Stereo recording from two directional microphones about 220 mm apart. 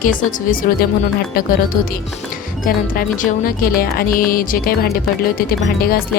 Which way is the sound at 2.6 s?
40° left (ahead or behind).